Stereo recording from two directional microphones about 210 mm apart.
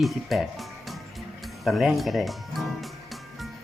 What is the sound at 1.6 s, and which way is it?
Speech, centre (ahead or behind).